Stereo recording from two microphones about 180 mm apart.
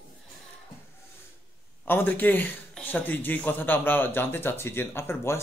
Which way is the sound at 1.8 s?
10° left (ahead or behind).